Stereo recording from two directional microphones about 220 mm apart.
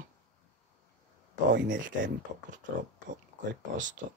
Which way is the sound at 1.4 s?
55° right (ahead or behind).